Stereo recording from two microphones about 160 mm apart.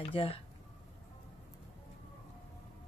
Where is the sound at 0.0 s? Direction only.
35° left (ahead or behind).